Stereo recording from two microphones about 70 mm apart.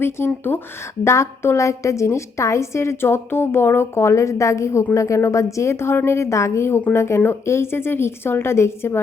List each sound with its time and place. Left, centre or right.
0.5 s a woman's voice: left